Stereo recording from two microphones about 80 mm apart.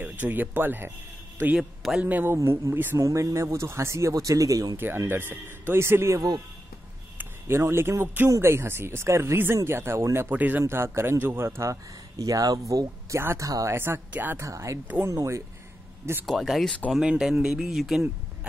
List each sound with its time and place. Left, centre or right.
0.0 s speech: right
1.6 s a man's voice: centre
2.0 s a man's voice: right
2.3 s speech: right
3.0 s speech: right
4.7 s speech: right
7.4 s speech: right
10.3 s a man's voice: right
10.6 s speech: right
13.7 s a man's voice: right
14.4 s speech: right
16.3 s speech: centre